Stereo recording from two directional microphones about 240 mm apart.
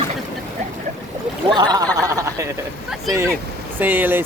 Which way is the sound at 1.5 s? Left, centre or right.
Centre.